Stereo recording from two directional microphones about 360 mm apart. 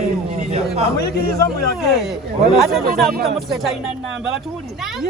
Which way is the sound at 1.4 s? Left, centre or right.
Centre.